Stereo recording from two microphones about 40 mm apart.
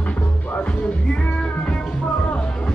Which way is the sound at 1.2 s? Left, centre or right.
Left.